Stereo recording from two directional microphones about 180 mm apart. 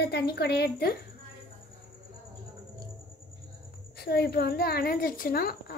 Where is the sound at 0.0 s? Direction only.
65° left (ahead or behind).